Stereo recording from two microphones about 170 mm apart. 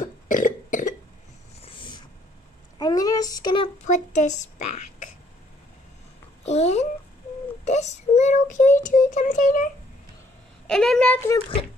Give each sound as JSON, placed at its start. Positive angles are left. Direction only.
{"t": 0.0, "sound": "cough", "side_deg": 50}
{"t": 1.6, "sound": "vehicle", "side_deg": 30}
{"t": 2.8, "sound": "a sound", "side_deg": 20}
{"t": 6.4, "sound": "a child's voice", "side_deg": 40}
{"t": 7.6, "sound": "child singing", "side_deg": 40}
{"t": 10.7, "sound": "speech", "side_deg": 5}